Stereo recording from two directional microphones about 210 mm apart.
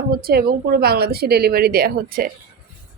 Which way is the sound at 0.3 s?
45° right (ahead or behind).